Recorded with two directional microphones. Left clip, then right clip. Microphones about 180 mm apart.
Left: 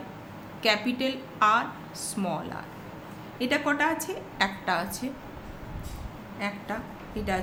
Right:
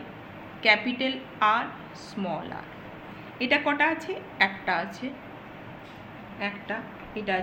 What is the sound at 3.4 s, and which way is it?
A woman's voice, 35° left (ahead or behind).